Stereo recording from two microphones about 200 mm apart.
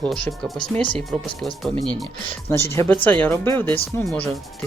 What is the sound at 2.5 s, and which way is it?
Speech, 15° left (ahead or behind).